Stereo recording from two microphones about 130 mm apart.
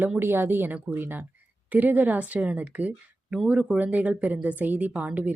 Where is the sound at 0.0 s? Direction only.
15° right (ahead or behind).